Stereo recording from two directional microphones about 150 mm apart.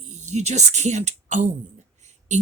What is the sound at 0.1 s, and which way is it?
Speech, 50° right (ahead or behind).